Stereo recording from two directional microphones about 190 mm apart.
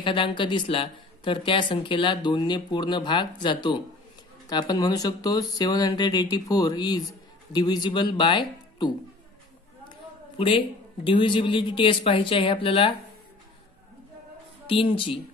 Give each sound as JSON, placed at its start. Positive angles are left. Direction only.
{"t": 0.0, "sound": "speech", "side_deg": 25}
{"t": 9.8, "sound": "a sound", "side_deg": 25}
{"t": 11.1, "sound": "speech", "side_deg": 25}
{"t": 14.7, "sound": "speech", "side_deg": 30}